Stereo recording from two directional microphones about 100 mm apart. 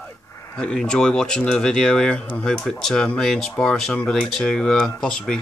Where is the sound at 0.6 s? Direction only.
10° left (ahead or behind).